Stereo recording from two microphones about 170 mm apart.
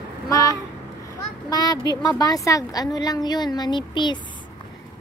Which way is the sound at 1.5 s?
20° left (ahead or behind).